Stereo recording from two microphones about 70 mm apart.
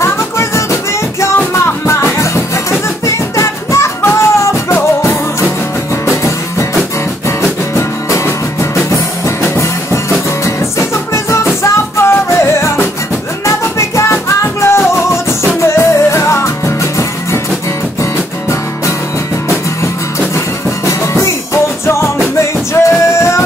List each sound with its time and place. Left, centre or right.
0.0 s music: left
3.1 s music: left
7.7 s music: left
11.6 s music: left
20.8 s music: left
22.8 s music: left